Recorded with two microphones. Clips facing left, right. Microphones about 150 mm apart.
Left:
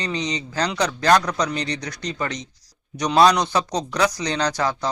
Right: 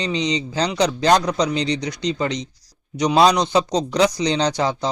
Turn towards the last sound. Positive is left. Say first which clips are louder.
# right 2 dB
turn(degrees=-20)  # may be behind; listen again after turning